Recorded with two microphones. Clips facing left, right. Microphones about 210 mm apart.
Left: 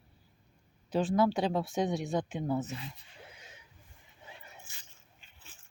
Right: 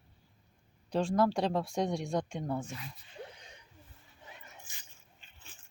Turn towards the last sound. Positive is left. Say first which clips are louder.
# right 1 dB
turn(degrees=10)  # may be behind; listen again after turning